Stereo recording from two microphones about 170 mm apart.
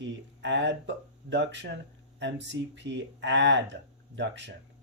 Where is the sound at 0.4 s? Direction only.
90° right.